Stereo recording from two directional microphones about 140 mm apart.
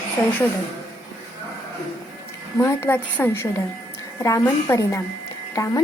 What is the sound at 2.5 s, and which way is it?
A woman's voice, 20° left (ahead or behind).